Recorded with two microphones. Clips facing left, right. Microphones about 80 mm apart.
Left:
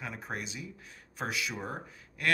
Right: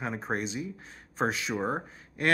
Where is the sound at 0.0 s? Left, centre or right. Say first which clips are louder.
Right 7 dB; right.